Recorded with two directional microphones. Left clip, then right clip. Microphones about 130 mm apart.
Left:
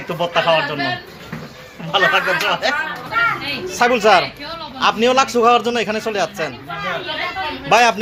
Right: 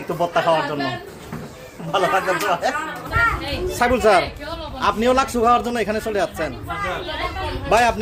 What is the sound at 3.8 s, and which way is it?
A man's voice, 20° right (ahead or behind).